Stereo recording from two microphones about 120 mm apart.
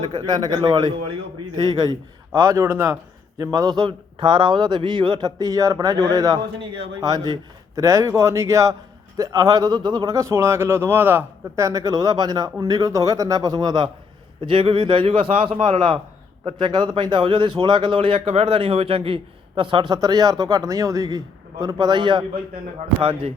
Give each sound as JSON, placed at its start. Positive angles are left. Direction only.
{"t": 0.0, "sound": "a man's voice", "side_deg": -35}
{"t": 14.4, "sound": "a man's voice", "side_deg": -45}